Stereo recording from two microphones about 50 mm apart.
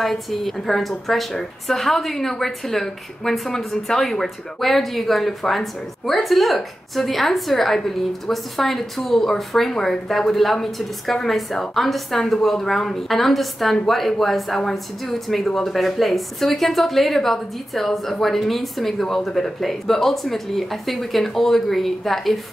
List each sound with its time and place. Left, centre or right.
0.0 s speech: centre